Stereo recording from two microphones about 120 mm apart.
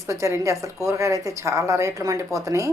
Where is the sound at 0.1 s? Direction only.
25° right (ahead or behind).